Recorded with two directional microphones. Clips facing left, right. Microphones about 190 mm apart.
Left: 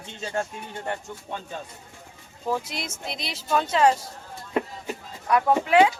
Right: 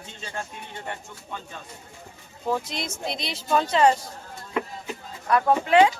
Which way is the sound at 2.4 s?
5° left (ahead or behind).